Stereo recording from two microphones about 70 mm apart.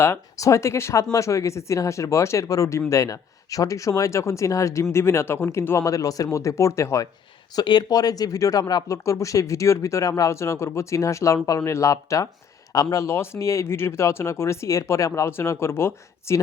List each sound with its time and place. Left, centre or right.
0.3 s speech: left
7.5 s speech: left
15.3 s speech: left